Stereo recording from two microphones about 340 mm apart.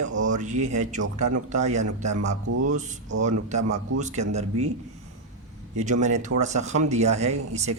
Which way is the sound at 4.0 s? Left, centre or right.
Centre.